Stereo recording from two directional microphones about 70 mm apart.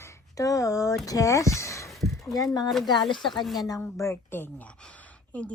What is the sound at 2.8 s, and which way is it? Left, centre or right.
Speech, left.